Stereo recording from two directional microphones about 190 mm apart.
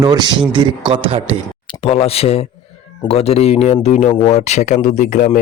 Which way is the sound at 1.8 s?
30° left (ahead or behind).